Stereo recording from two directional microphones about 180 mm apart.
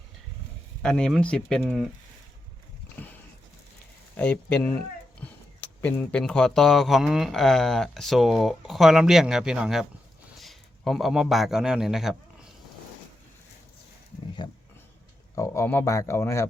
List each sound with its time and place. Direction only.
0.8 s speech: 5° left (ahead or behind)
4.2 s speech: 5° left (ahead or behind)
5.8 s a man's voice: 5° left (ahead or behind)
14.4 s a sound: 25° left (ahead or behind)
15.4 s speech: 15° left (ahead or behind)